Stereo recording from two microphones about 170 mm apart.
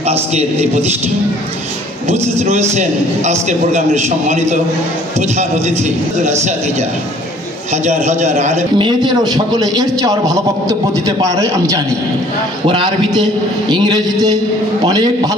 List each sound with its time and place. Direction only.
0.0 s a man's voice: 40° right (ahead or behind)
2.2 s a man's voice: 40° right (ahead or behind)
7.7 s a man's voice: 40° right (ahead or behind)
8.7 s a man's voice: 30° right (ahead or behind)